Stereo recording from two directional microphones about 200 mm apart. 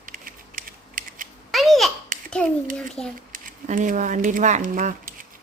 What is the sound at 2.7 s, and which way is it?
Speech, 5° left (ahead or behind).